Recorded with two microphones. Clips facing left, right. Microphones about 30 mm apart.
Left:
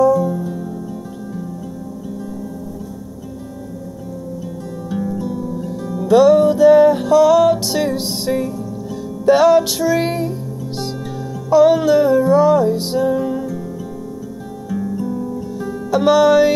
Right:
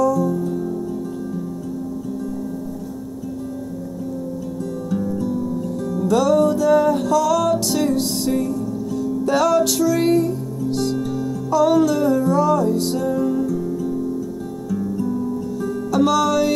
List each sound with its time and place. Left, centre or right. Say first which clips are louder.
0.0 s music: left 4 dB; left
0.4 s music: right 2 dB; centre
4.8 s music: left 1 dB; centre
15.6 s music: left 3 dB; left